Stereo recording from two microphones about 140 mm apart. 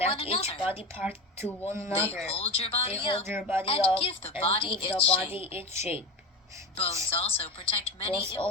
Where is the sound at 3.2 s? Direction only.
15° right (ahead or behind).